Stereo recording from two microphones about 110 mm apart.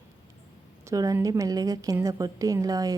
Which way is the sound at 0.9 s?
30° right (ahead or behind).